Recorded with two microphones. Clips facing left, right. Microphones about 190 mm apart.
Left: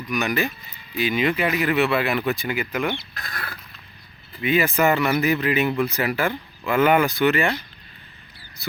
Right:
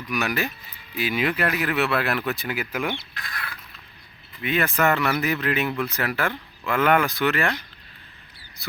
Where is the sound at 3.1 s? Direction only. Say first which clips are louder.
Left 2 dB; 40° left (ahead or behind).